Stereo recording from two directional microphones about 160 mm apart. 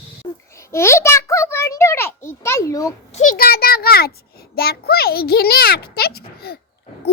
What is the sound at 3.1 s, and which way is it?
A child's voice, 55° left (ahead or behind).